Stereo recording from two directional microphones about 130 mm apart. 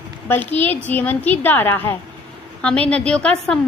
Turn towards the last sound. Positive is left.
turn(degrees=5)  # may be behind; listen again after turning